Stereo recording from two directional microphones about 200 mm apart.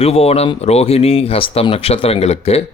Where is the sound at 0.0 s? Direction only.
30° left (ahead or behind).